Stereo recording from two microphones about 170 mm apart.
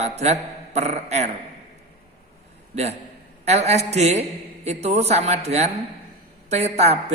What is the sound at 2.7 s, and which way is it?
A man's voice, 40° right (ahead or behind).